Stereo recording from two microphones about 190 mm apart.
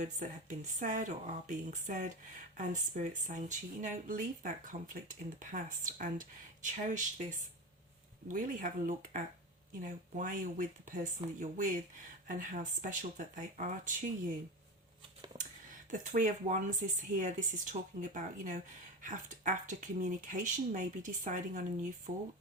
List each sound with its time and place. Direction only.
0.0 s speech: 40° right (ahead or behind)
8.3 s speech: 45° right (ahead or behind)
15.9 s speech: 45° right (ahead or behind)